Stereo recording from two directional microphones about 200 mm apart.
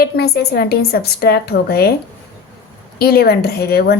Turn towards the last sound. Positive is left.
turn(degrees=50)  # may be behind; listen again after turning